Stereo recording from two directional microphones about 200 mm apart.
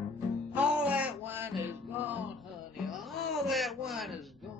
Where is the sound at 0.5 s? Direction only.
5° right (ahead or behind).